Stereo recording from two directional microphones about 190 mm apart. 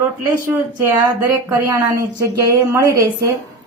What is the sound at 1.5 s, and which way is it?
Speech, 15° right (ahead or behind).